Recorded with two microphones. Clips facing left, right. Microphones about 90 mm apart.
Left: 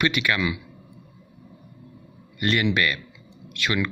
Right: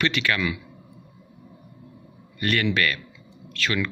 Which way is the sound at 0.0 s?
15° left (ahead or behind).